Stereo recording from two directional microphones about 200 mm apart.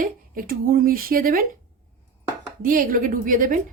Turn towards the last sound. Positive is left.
turn(degrees=-40)  # may be behind; listen again after turning